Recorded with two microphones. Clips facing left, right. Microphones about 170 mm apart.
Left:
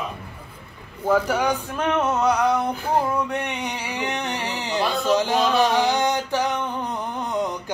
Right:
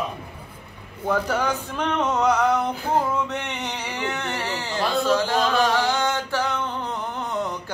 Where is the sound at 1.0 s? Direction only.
10° left (ahead or behind).